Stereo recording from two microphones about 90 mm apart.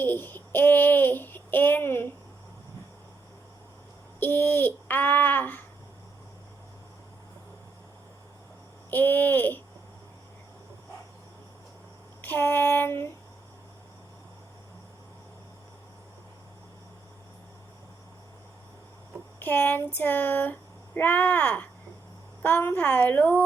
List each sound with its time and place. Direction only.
0.0 s speech: 25° left (ahead or behind)
4.2 s speech: 20° left (ahead or behind)
8.9 s speech: 20° left (ahead or behind)
12.2 s speech: 25° left (ahead or behind)
19.4 s speech: 20° left (ahead or behind)